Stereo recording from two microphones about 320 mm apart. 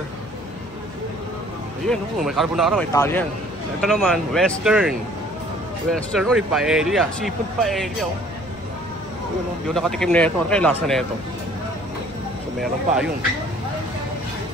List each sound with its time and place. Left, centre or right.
1.9 s speech: centre
9.8 s speech: centre